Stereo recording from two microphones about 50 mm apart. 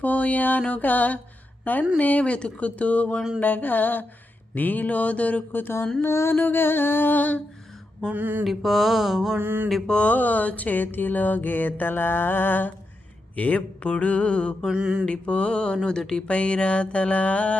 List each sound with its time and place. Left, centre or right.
0.0 s a sound: left
1.6 s speech: left
3.4 s a sound: left
6.0 s a sound: left
6.4 s music: left
8.1 s mantra: right
8.4 s mantra: centre
9.4 s mantra: right
9.8 s a sound: left
13.3 s speech: left
14.7 s mantra: centre
15.0 s speech: left